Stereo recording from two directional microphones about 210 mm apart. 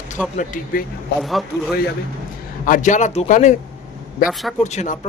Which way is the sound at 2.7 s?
35° left (ahead or behind).